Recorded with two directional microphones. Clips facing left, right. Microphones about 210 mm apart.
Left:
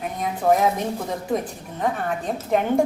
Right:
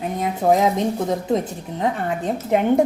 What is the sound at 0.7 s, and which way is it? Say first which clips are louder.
Speech: right 5 dB; 20° right (ahead or behind).